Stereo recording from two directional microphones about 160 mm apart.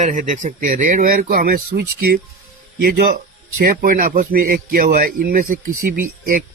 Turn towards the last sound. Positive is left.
turn(degrees=-55)  # may be behind; listen again after turning